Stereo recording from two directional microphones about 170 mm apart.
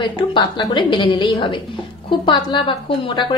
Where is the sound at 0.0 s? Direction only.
30° left (ahead or behind).